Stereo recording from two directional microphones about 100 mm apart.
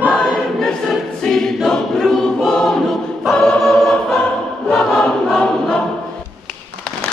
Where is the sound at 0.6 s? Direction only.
5° left (ahead or behind).